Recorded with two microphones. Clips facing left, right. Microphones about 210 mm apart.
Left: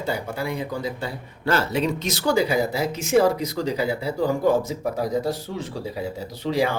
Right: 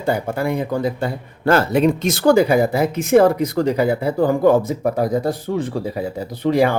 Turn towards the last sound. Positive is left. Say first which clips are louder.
# right 6 dB
turn(degrees=-55)  # may be behind; listen again after turning